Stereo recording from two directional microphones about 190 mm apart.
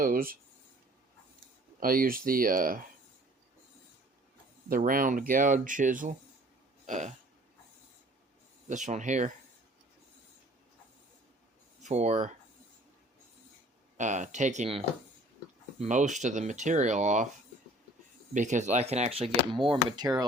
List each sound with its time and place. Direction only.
0.0 s speech: 50° right (ahead or behind)
1.8 s speech: 50° right (ahead or behind)
4.7 s speech: 45° right (ahead or behind)
6.8 s throat clearing: 40° right (ahead or behind)
8.7 s speech: 40° right (ahead or behind)
11.8 s speech: 35° right (ahead or behind)
13.9 s speech: 40° right (ahead or behind)
15.8 s speech: 40° right (ahead or behind)
18.3 s speech: 40° right (ahead or behind); by 20.2 s 20° right (ahead or behind)